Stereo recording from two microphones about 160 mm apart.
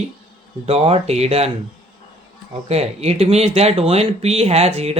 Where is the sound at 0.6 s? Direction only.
40° right (ahead or behind).